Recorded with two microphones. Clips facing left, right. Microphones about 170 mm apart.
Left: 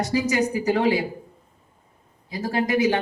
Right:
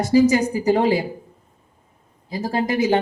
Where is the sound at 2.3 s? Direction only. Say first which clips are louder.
Right 1 dB; 30° right (ahead or behind).